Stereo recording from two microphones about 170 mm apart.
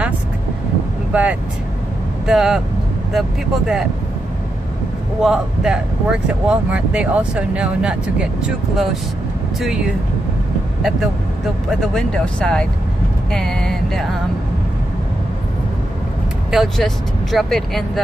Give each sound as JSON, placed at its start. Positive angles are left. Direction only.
{"t": 1.1, "sound": "speech", "side_deg": -10}
{"t": 5.2, "sound": "speech", "side_deg": -5}
{"t": 11.8, "sound": "speech", "side_deg": 5}
{"t": 16.4, "sound": "speech", "side_deg": 0}